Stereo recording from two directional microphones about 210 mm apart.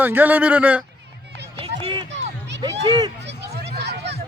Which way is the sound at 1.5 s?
25° right (ahead or behind).